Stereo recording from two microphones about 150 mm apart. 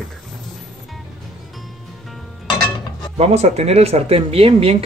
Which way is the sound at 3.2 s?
45° right (ahead or behind).